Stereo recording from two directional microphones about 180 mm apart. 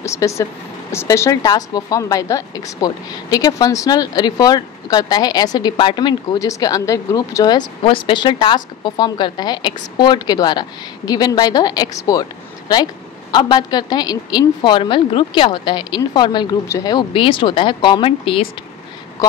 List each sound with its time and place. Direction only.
0.0 s speech: 15° left (ahead or behind)